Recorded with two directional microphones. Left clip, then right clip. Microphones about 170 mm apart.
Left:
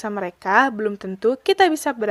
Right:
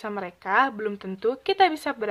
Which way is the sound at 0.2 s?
35° left (ahead or behind).